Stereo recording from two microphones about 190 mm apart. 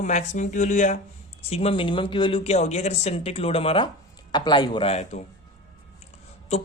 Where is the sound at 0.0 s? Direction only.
40° left (ahead or behind).